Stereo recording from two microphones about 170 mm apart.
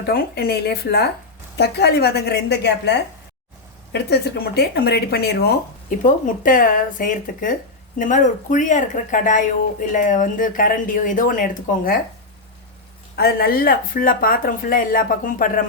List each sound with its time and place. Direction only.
0.1 s speech: 65° left (ahead or behind)
6.1 s speech: 50° left (ahead or behind)
13.1 s speech: 65° left (ahead or behind)